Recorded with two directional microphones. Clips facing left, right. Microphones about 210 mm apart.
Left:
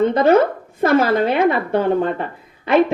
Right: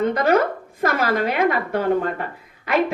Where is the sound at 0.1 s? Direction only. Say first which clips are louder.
Left 5 dB; 25° left (ahead or behind).